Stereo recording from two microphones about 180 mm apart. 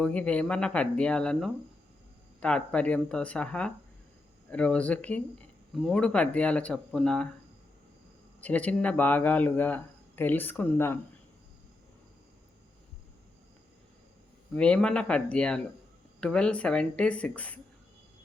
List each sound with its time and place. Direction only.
0.0 s speech: 5° left (ahead or behind)
8.4 s speech: 10° left (ahead or behind)
14.5 s speech: 5° left (ahead or behind)